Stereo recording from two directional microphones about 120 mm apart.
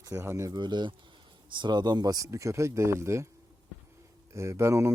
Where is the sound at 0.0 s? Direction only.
20° right (ahead or behind).